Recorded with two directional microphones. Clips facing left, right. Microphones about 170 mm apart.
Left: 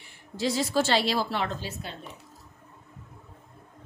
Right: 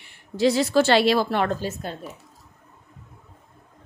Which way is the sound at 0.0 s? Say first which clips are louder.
Right 9 dB; 70° right (ahead or behind).